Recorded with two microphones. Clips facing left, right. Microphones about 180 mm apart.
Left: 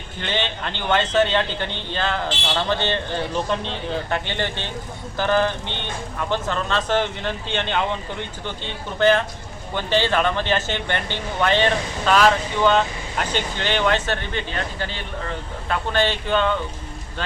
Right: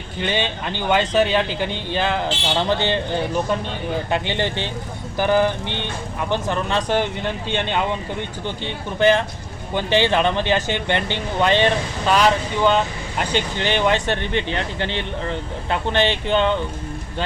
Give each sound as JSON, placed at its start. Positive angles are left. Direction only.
{"t": 0.2, "sound": "a man's voice", "side_deg": -10}
{"t": 9.0, "sound": "a man's voice", "side_deg": -15}